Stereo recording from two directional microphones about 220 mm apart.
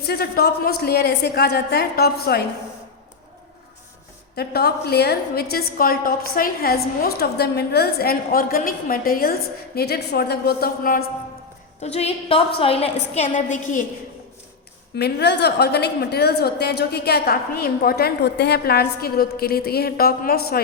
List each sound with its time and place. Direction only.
0.0 s a woman's voice: 45° left (ahead or behind)
4.4 s a woman's voice: 45° left (ahead or behind)
11.8 s a woman's voice: 30° left (ahead or behind)
14.9 s a woman's voice: 50° left (ahead or behind)